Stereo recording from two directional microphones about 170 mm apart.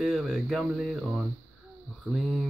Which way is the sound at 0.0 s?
Centre (ahead or behind).